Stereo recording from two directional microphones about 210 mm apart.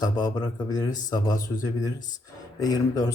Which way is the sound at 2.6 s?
15° left (ahead or behind).